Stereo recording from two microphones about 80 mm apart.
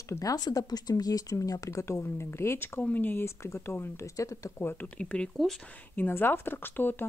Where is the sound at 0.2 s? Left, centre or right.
Left.